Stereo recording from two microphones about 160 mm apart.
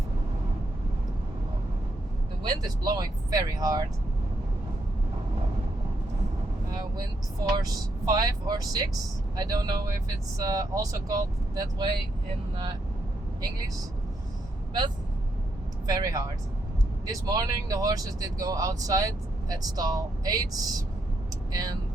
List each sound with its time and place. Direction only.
2.5 s speech: 25° right (ahead or behind)
6.7 s vehicle: 25° right (ahead or behind)
7.6 s speech: 25° right (ahead or behind)
15.9 s speech: 25° right (ahead or behind)